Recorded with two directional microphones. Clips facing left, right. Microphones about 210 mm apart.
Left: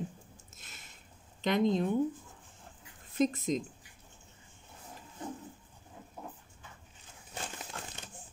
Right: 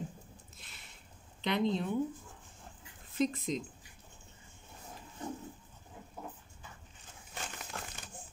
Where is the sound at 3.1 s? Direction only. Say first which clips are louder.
Left 3 dB; 45° left (ahead or behind).